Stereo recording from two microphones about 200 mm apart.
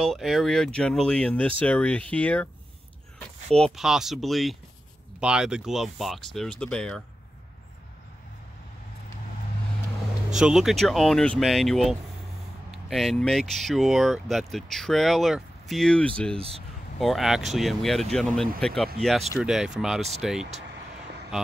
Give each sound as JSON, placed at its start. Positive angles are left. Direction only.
{"t": 0.0, "sound": "speech", "side_deg": 0}
{"t": 3.5, "sound": "speech", "side_deg": 0}
{"t": 10.4, "sound": "speech", "side_deg": 0}
{"t": 16.3, "sound": "speech", "side_deg": -30}
{"t": 17.0, "sound": "speech", "side_deg": 0}